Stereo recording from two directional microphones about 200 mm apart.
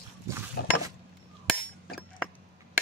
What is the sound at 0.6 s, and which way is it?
Mechanisms, 50° left (ahead or behind).